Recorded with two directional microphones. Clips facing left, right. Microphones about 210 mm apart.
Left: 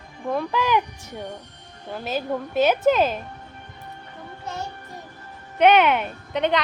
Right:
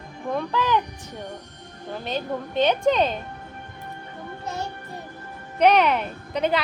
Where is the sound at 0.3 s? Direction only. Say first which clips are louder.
Left 1 dB; 10° left (ahead or behind).